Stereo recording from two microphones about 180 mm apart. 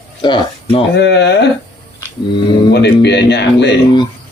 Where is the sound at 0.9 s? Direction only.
70° left (ahead or behind).